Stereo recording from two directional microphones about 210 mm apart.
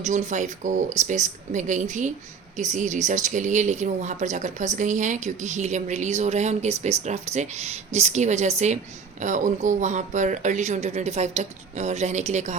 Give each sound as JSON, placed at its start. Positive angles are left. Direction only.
{"t": 0.0, "sound": "speech", "side_deg": -35}